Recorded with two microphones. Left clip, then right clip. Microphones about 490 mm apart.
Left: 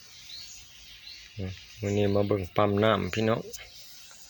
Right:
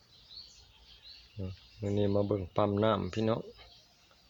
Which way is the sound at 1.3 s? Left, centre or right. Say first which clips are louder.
Left 3 dB; right.